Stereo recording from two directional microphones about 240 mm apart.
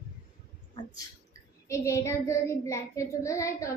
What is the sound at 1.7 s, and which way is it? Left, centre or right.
Child singing, centre.